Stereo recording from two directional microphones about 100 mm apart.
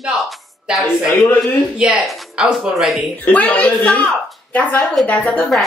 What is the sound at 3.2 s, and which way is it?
Speech, 15° left (ahead or behind).